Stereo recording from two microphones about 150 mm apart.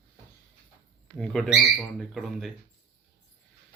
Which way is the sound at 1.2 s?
Centre (ahead or behind).